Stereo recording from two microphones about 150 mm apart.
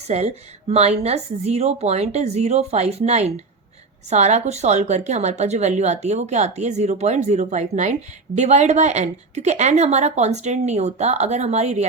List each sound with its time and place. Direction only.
0.1 s a woman's voice: 45° right (ahead or behind)